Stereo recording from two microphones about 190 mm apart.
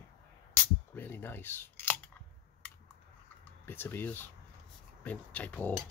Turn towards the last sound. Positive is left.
turn(degrees=10)  # may be behind; listen again after turning